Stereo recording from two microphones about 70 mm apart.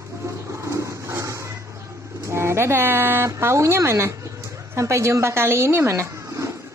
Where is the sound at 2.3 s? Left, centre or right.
Right.